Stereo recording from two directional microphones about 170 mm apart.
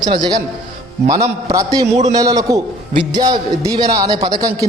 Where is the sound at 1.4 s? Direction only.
20° right (ahead or behind).